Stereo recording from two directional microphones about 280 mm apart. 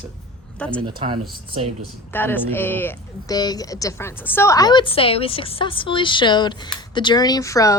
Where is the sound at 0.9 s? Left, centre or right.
Centre.